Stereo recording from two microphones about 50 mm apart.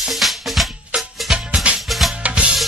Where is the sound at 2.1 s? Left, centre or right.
Right.